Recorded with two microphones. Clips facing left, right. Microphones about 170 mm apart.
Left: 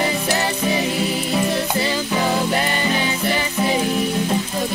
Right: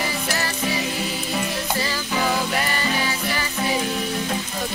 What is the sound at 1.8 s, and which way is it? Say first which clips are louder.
Music: left 4 dB; 20° left (ahead or behind).